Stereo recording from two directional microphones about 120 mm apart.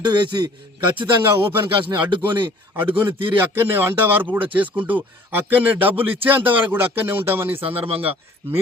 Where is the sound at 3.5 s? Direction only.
20° right (ahead or behind).